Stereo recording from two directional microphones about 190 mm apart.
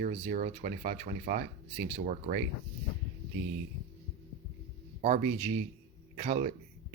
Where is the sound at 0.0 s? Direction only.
45° right (ahead or behind).